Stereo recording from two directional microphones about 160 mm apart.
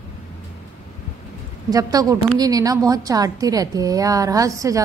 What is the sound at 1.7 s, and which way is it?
A woman's voice, 25° right (ahead or behind).